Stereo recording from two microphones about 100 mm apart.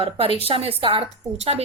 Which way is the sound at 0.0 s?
70° right (ahead or behind).